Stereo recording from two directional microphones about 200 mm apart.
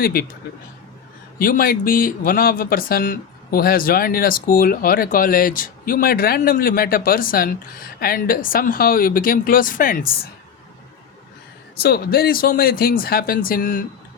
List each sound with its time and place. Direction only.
0.0 s speech: 50° left (ahead or behind)
1.4 s speech: 45° left (ahead or behind)
11.8 s speech: 50° left (ahead or behind)